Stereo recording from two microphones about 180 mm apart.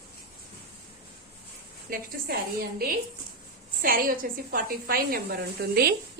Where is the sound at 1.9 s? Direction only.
60° right (ahead or behind).